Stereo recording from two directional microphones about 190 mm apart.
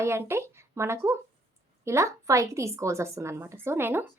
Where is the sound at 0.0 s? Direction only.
15° right (ahead or behind).